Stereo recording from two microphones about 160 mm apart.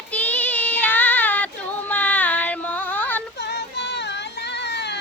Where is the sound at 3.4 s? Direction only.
90° left.